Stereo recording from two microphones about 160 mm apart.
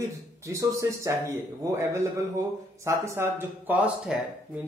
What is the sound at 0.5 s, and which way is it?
Speech, 20° right (ahead or behind).